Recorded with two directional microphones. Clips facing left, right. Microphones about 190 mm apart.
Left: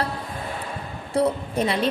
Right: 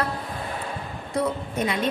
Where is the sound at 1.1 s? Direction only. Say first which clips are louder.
Left 4 dB; 30° left (ahead or behind).